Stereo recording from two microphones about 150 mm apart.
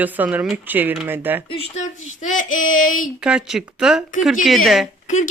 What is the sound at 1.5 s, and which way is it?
Speech, 40° left (ahead or behind).